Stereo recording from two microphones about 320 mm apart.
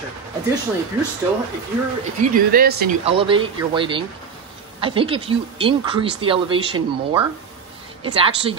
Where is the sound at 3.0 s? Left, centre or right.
Centre.